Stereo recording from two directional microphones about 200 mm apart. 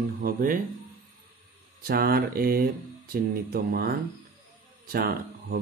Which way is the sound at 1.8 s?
50° right (ahead or behind).